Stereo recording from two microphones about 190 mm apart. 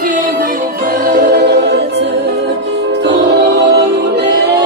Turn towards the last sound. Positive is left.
turn(degrees=-60)  # may be behind; listen again after turning